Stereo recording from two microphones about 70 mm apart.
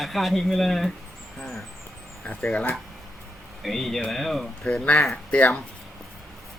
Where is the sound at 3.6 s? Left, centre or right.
Centre.